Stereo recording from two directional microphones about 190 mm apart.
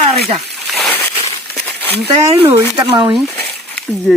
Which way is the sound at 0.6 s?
Centre (ahead or behind).